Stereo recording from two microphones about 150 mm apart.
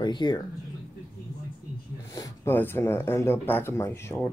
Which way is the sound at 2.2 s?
15° left (ahead or behind).